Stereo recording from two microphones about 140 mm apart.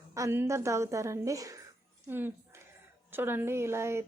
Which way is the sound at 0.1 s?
20° right (ahead or behind).